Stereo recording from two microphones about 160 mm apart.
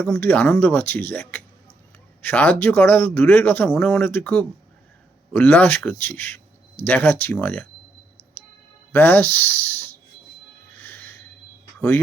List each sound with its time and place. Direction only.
0.0 s speech: 10° left (ahead or behind)
8.9 s speech: 10° left (ahead or behind)
10.8 s music: 10° left (ahead or behind)